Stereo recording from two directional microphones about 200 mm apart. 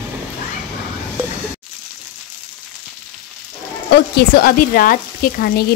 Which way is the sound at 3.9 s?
50° left (ahead or behind).